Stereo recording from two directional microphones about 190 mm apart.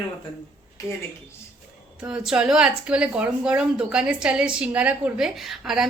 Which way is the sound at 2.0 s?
5° right (ahead or behind).